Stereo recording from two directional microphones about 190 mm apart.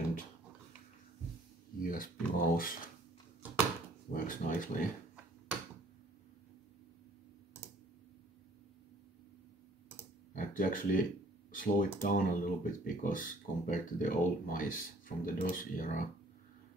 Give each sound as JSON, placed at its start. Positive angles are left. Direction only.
{"t": 1.8, "sound": "speech", "side_deg": 45}
{"t": 4.1, "sound": "speech", "side_deg": 45}
{"t": 10.3, "sound": "speech", "side_deg": 45}